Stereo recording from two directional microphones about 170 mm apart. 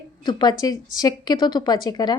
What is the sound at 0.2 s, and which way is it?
Speech, 25° left (ahead or behind).